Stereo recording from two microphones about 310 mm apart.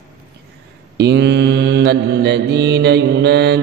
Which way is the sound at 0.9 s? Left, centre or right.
Right.